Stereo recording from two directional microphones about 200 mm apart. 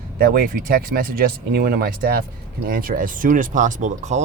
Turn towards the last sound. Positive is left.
turn(degrees=-35)  # may be behind; listen again after turning